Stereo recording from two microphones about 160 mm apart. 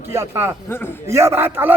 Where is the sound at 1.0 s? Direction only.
15° right (ahead or behind).